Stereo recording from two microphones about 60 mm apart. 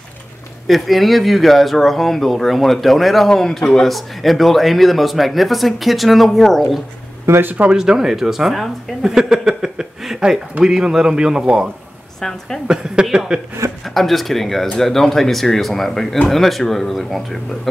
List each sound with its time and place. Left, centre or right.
0.7 s a man's voice: centre
7.2 s speech: right
7.7 s speech: centre
12.2 s a man's voice: centre
12.6 s speech: centre
13.8 s a man's voice: centre